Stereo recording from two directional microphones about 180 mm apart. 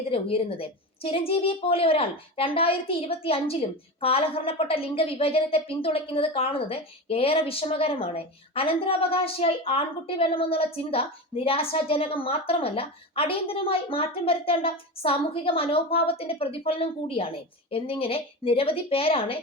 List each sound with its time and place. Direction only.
0.1 s a woman's voice: 30° left (ahead or behind)